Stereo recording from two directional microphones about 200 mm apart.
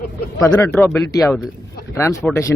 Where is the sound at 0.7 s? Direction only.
5° left (ahead or behind).